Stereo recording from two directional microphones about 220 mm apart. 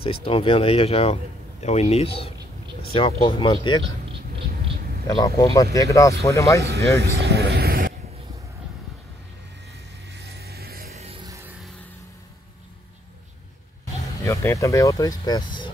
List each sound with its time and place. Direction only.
0.0 s speech: 25° left (ahead or behind)
5.0 s speech: 15° left (ahead or behind)
6.6 s a man's voice: 50° right (ahead or behind)
10.1 s music: 45° right (ahead or behind)
10.9 s music: 30° right (ahead or behind)
14.2 s speech: 10° left (ahead or behind)